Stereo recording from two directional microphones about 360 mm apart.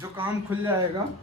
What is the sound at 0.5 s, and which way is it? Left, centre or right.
Speech, centre.